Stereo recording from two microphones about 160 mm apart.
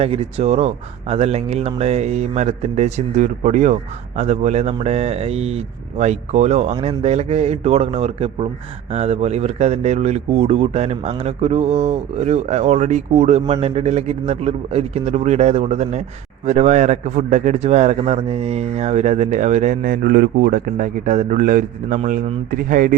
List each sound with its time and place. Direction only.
0.0 s a man's voice: 40° right (ahead or behind); by 23.0 s 60° right (ahead or behind)